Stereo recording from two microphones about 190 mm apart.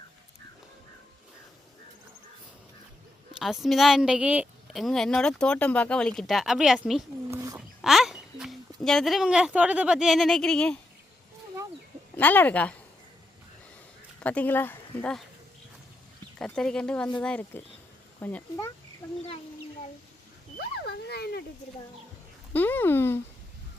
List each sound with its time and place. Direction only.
3.3 s speech: centre (ahead or behind)
7.3 s a sound: 15° right (ahead or behind)
7.8 s speech: centre (ahead or behind)
12.1 s speech: 10° left (ahead or behind)
14.2 s speech: 5° left (ahead or behind)
16.4 s speech: 5° left (ahead or behind)
20.6 s a sound: 60° left (ahead or behind)
22.5 s speech: 10° left (ahead or behind)